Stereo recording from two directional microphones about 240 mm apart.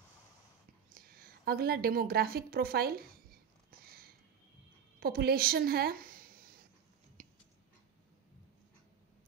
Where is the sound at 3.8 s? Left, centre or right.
Right.